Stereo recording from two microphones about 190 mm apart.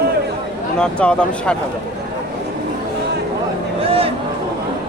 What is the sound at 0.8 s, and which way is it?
Speech, 5° left (ahead or behind).